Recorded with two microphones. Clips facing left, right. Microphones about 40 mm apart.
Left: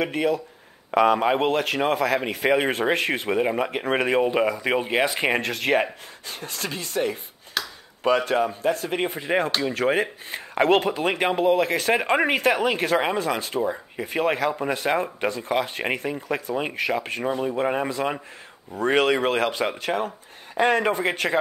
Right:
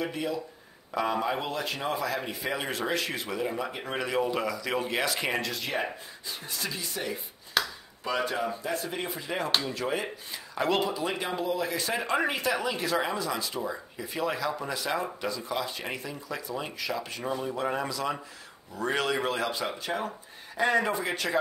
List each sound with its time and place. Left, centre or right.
0.0 s a man's voice: left
7.6 s a sound: centre
8.0 s a man's voice: left